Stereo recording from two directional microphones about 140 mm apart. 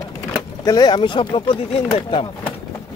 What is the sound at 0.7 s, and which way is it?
Speech, 30° left (ahead or behind).